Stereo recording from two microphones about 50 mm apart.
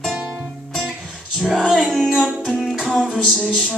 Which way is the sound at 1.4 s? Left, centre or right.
Centre.